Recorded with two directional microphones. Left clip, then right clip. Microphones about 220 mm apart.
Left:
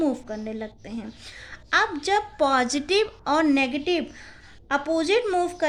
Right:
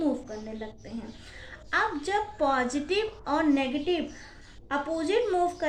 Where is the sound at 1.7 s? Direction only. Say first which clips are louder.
Left 5 dB; 50° left (ahead or behind).